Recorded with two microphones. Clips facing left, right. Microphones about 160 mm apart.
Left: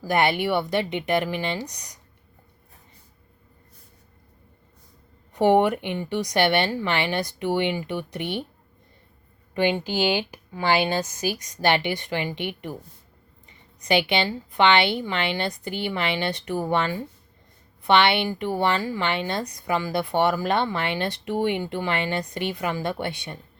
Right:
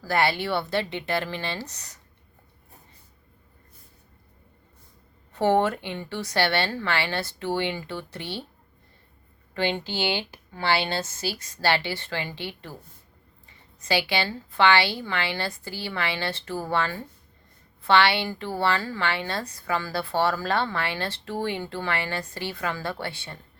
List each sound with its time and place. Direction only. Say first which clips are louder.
0.0 s speech: left 3 dB; 20° left (ahead or behind)
5.3 s speech: left 3 dB; 15° left (ahead or behind)
9.6 s a woman's voice: left 4 dB; 15° left (ahead or behind)